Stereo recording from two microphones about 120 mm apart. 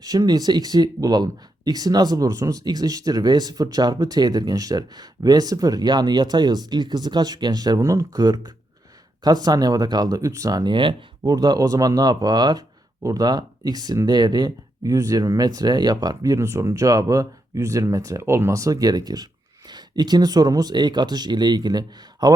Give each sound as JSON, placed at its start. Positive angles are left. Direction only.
{"t": 0.0, "sound": "speech", "side_deg": -35}